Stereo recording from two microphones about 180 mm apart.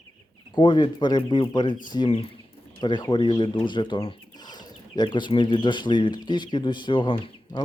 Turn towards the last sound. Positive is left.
turn(degrees=30)  # may be behind; listen again after turning